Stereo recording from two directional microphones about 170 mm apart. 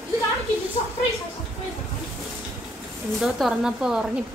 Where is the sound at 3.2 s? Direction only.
Centre (ahead or behind).